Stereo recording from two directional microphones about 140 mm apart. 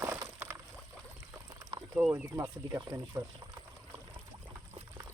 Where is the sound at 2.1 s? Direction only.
15° right (ahead or behind).